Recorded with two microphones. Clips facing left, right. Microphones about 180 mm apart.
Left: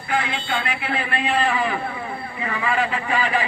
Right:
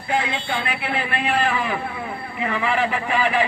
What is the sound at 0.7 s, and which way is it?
Speech, 10° right (ahead or behind).